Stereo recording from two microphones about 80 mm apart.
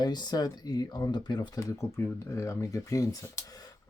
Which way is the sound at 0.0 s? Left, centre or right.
Left.